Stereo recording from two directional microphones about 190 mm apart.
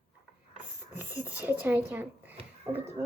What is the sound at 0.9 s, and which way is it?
A child's voice, 10° right (ahead or behind).